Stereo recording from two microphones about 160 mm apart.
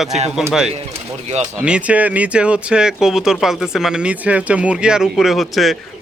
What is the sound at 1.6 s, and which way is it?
Speech, 5° right (ahead or behind).